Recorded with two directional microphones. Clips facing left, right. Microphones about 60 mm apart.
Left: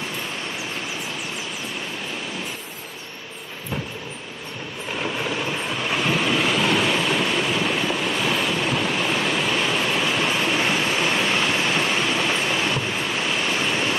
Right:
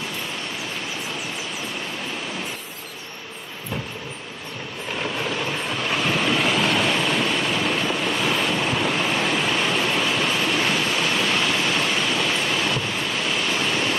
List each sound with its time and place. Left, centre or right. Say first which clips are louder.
4.9 s vehicle: even; centre
10.4 s a sound: even; centre
12.7 s waves: left 1 dB; centre